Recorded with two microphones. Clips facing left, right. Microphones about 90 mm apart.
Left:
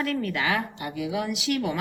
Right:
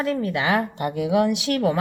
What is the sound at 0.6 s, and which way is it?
Speech, 50° right (ahead or behind).